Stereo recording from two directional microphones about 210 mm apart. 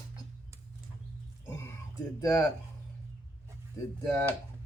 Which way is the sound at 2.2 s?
15° left (ahead or behind).